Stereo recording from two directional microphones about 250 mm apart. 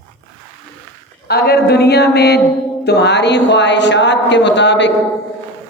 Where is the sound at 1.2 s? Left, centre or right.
Left.